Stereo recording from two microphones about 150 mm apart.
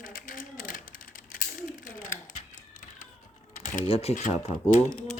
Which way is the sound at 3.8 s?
40° left (ahead or behind).